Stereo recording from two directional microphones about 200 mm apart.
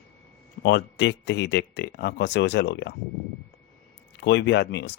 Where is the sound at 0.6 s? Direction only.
60° left (ahead or behind).